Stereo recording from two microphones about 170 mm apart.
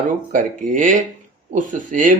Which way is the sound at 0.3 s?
50° right (ahead or behind).